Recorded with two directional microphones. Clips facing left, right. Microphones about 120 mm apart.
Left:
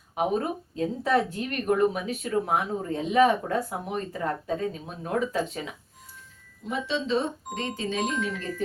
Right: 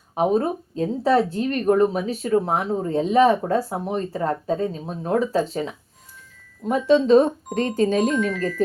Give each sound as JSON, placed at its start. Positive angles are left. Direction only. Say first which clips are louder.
{"t": 0.1, "sound": "speech", "louder": "right 6 dB", "side_deg": -35}
{"t": 6.7, "sound": "speech", "louder": "right 12 dB", "side_deg": -45}